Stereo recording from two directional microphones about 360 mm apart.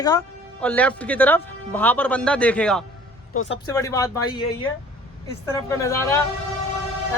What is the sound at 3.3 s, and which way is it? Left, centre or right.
Speech, left.